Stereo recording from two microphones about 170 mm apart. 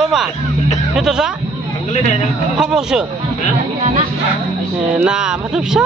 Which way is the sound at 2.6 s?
5° right (ahead or behind).